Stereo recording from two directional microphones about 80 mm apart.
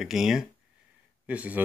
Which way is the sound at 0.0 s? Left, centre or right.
Centre.